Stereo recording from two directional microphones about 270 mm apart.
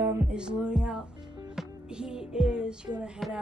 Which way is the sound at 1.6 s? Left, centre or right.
Centre.